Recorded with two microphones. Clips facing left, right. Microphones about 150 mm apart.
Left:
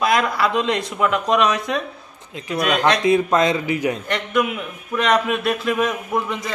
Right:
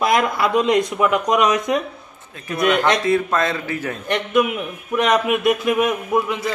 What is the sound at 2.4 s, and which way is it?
A man's voice, 20° left (ahead or behind).